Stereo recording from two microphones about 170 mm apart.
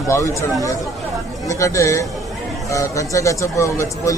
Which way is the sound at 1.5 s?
20° left (ahead or behind).